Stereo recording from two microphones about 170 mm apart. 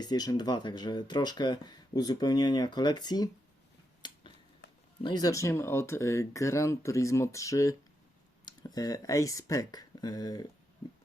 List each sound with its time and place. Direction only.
0.0 s speech: 25° left (ahead or behind)
4.0 s a sound: 25° left (ahead or behind)
5.0 s speech: 25° left (ahead or behind)